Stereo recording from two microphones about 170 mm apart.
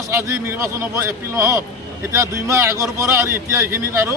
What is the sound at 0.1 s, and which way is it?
Speech, 15° right (ahead or behind).